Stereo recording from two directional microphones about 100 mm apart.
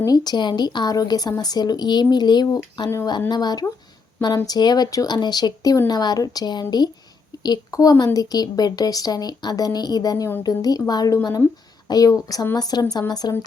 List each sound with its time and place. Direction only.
0.0 s speech: 40° left (ahead or behind)